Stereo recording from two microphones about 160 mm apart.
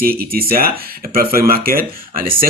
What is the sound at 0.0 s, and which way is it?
Speech, 70° right (ahead or behind).